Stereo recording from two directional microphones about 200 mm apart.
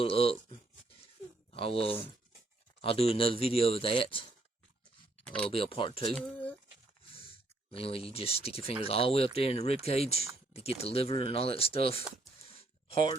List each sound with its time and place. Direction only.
0.0 s a sound: 30° left (ahead or behind)
1.5 s speech: 30° left (ahead or behind)
5.4 s speech: 25° left (ahead or behind)